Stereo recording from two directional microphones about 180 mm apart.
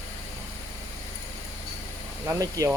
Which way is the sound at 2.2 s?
20° right (ahead or behind).